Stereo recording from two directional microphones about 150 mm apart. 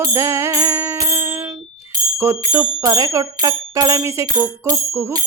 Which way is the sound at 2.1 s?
15° right (ahead or behind).